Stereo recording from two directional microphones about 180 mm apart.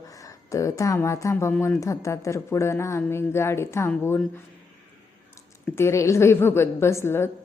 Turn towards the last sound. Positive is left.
turn(degrees=15)  # may be behind; listen again after turning